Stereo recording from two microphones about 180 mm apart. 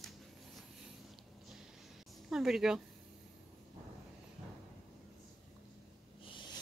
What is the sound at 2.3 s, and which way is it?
Speech, centre (ahead or behind).